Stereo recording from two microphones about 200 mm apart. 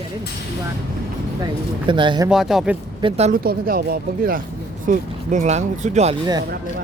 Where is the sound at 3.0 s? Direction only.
30° right (ahead or behind).